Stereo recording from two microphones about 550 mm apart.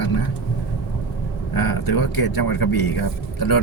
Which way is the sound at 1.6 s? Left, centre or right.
Left.